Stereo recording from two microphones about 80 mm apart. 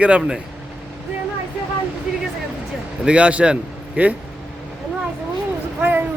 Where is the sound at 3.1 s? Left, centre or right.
Centre.